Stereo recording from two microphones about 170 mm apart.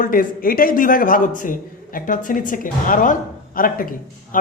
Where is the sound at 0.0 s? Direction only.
55° left (ahead or behind).